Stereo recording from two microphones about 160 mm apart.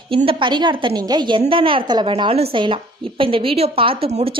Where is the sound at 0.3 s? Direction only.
30° right (ahead or behind).